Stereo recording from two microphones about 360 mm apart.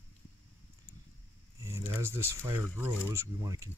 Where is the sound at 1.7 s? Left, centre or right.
Centre.